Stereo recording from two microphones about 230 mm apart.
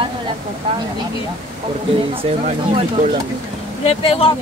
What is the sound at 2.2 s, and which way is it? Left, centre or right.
Speech, right.